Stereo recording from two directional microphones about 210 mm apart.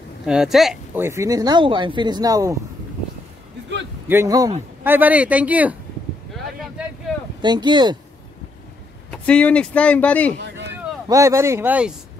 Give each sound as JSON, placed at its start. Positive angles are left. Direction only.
{"t": 0.3, "sound": "speech", "side_deg": 0}
{"t": 1.0, "sound": "speech", "side_deg": -15}
{"t": 4.1, "sound": "speech", "side_deg": -15}
{"t": 6.8, "sound": "a sound", "side_deg": -5}
{"t": 7.4, "sound": "speech", "side_deg": -20}
{"t": 9.1, "sound": "a man's voice", "side_deg": 5}
{"t": 11.1, "sound": "speech", "side_deg": -15}